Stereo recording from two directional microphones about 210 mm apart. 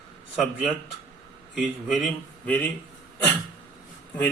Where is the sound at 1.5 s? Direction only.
Centre (ahead or behind).